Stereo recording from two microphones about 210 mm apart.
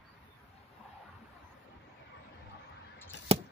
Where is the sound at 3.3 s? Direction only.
25° right (ahead or behind).